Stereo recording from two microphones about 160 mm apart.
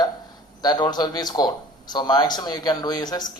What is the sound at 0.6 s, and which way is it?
Speech, 25° left (ahead or behind).